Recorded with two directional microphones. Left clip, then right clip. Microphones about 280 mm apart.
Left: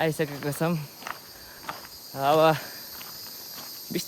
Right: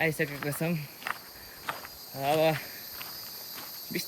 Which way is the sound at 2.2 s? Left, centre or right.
Centre.